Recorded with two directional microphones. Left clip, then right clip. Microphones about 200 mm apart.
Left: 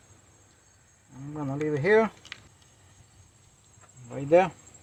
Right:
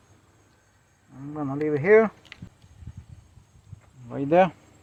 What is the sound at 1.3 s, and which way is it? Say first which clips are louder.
Speech: right 3 dB; 20° right (ahead or behind).